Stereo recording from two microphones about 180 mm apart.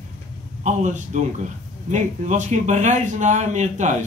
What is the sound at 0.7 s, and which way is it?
A man's voice, 40° right (ahead or behind).